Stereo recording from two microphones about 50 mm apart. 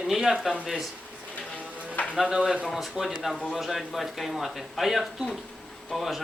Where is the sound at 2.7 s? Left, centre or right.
Centre.